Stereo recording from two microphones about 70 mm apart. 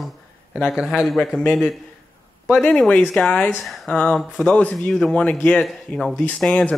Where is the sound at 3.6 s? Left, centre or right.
Centre.